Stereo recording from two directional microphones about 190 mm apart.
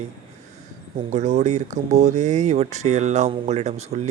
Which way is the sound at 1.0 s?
35° right (ahead or behind).